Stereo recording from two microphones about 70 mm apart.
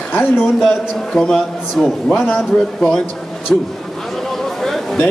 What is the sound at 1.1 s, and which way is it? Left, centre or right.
A man's voice, centre.